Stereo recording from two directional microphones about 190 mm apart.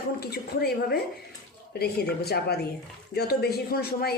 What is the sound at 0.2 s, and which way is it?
Speech, 55° left (ahead or behind).